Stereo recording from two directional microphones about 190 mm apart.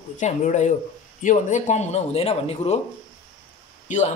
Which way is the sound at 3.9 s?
40° left (ahead or behind).